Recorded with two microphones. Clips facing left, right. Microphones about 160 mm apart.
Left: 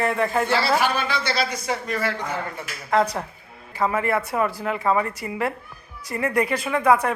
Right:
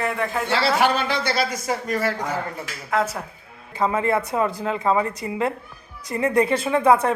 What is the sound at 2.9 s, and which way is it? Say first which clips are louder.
Speech: left 2 dB; 5° right (ahead or behind).